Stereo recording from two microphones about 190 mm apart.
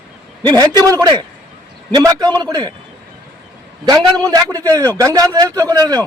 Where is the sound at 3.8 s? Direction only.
20° right (ahead or behind).